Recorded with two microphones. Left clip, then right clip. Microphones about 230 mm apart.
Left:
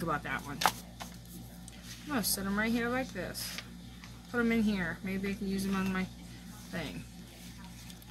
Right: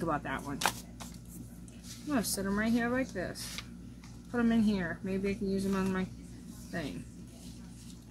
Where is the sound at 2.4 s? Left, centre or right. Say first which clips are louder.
Right 1 dB; left.